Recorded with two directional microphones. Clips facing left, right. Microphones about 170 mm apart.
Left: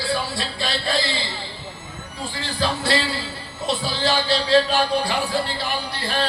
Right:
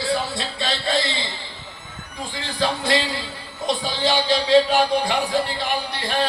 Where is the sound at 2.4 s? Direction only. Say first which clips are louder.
Right 1 dB; 15° right (ahead or behind).